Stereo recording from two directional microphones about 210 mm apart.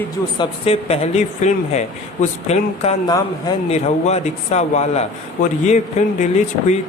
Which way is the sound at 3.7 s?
30° left (ahead or behind).